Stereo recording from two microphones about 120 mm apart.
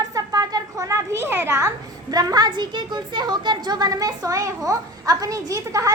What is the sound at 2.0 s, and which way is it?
A woman's voice, 30° right (ahead or behind).